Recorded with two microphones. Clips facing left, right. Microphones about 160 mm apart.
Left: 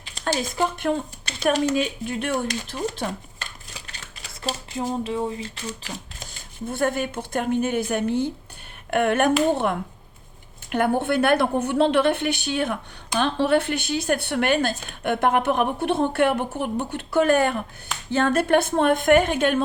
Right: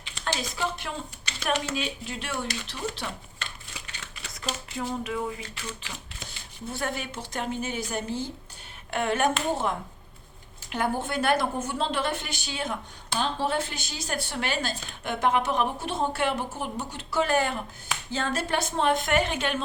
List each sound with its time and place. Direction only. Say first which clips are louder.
0.0 s a woman's voice: left 6 dB; 45° left (ahead or behind)
4.4 s speech: left 5 dB; 35° left (ahead or behind)
6.1 s speech: left 5 dB; 50° left (ahead or behind)
10.7 s speech: left 7 dB; 60° left (ahead or behind)